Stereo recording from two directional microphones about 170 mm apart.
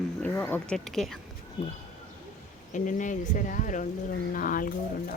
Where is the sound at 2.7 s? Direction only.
50° left (ahead or behind).